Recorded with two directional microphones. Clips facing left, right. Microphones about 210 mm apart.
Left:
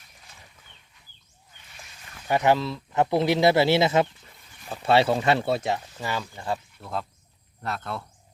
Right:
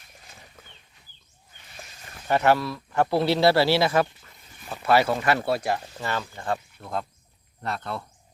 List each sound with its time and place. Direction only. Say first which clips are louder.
2.2 s speech: even; 15° left (ahead or behind)